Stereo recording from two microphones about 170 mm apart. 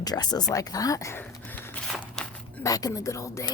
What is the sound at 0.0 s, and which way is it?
Speech, 25° left (ahead or behind).